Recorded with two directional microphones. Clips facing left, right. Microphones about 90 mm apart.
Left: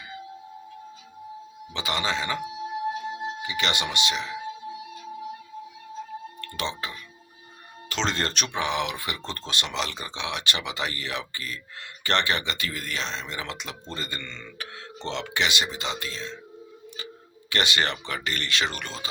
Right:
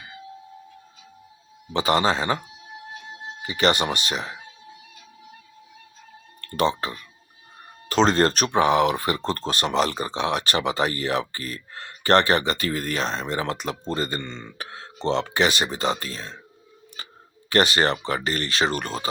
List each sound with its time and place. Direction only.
1.7 s speech: 40° right (ahead or behind)
3.4 s speech: 40° right (ahead or behind)
6.4 s speech: 40° right (ahead or behind)
17.5 s speech: 40° right (ahead or behind)